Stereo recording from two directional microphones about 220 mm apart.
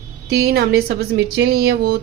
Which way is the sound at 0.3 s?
45° right (ahead or behind).